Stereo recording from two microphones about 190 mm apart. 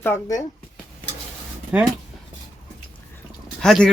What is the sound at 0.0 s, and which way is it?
Speech, 15° left (ahead or behind).